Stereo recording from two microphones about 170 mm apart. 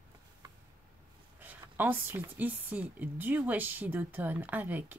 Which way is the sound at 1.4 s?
10° right (ahead or behind).